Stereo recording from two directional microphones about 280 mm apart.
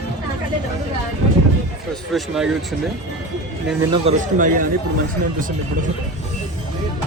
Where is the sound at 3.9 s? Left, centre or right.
Right.